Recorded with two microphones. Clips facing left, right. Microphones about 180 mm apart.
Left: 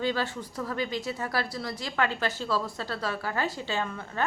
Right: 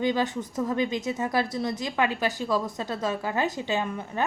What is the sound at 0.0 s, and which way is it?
A woman's voice, 20° right (ahead or behind).